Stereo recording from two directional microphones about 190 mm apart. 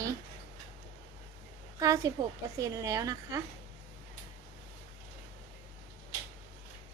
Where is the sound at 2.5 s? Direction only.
20° right (ahead or behind).